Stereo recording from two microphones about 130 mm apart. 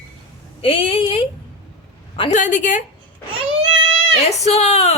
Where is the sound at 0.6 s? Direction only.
45° left (ahead or behind).